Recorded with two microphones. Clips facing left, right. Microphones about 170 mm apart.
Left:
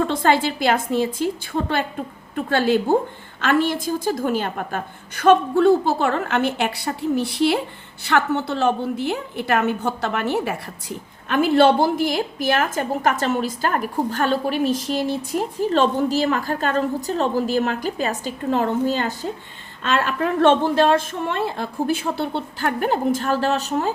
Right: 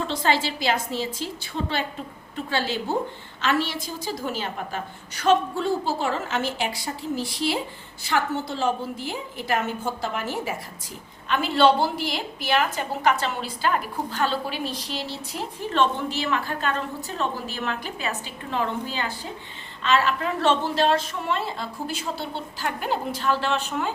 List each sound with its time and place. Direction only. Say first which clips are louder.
0.0 s a woman's voice: left 5 dB; 55° left (ahead or behind)